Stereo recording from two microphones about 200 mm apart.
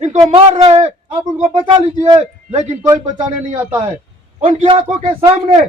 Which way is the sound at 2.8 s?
15° right (ahead or behind).